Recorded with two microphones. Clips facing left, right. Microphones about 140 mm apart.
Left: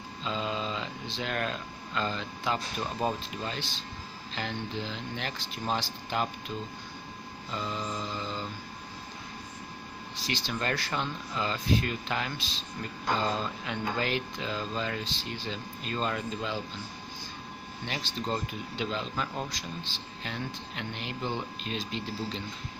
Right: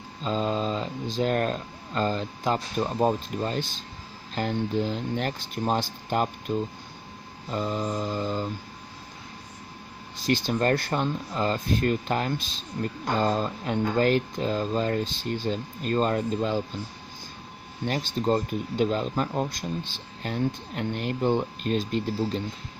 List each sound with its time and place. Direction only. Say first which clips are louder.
0.2 s speech: right 6 dB; 40° right (ahead or behind)
7.5 s speech: right 7 dB; 45° right (ahead or behind)
10.2 s speech: right 9 dB; 50° right (ahead or behind)
17.8 s speech: right 9 dB; 45° right (ahead or behind)
19.5 s speech: right 6 dB; 50° right (ahead or behind)